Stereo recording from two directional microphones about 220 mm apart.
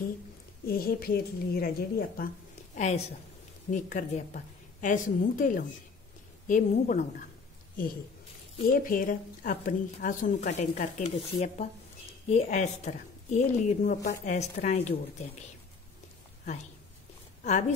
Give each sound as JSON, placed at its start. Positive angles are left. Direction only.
{"t": 0.7, "sound": "a woman's voice", "side_deg": 40}
{"t": 2.7, "sound": "a woman's voice", "side_deg": 30}
{"t": 8.7, "sound": "a woman's voice", "side_deg": 40}
{"t": 17.4, "sound": "speech", "side_deg": 30}